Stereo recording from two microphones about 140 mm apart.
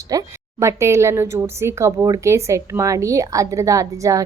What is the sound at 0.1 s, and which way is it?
A woman's voice, 25° right (ahead or behind).